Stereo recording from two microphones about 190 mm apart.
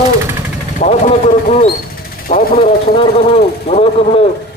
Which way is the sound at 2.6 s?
30° left (ahead or behind).